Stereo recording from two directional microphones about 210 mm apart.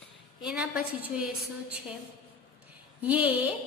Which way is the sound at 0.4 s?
5° right (ahead or behind).